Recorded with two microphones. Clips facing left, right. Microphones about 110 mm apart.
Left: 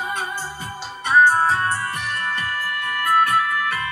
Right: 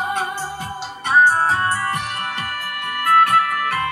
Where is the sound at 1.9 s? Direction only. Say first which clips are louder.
Right 2 dB; 75° right (ahead or behind).